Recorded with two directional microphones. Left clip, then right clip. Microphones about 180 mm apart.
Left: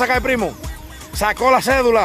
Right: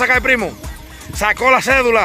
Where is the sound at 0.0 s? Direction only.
15° left (ahead or behind).